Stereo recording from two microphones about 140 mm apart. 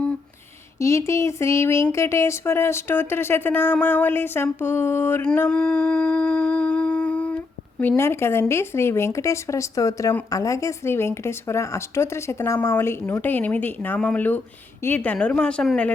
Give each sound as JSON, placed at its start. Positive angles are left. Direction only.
{"t": 0.8, "sound": "speech", "side_deg": 20}
{"t": 5.5, "sound": "a sound", "side_deg": 5}
{"t": 7.8, "sound": "speech", "side_deg": 15}